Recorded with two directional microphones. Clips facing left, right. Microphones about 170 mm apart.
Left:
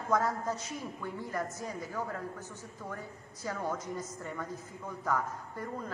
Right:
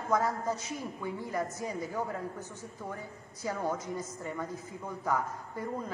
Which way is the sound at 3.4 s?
10° right (ahead or behind).